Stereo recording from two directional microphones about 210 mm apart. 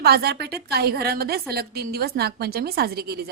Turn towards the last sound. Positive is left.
turn(degrees=-50)  # may be behind; listen again after turning